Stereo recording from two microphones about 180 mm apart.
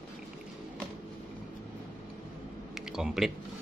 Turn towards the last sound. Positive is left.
turn(degrees=0)  # may be behind; listen again after turning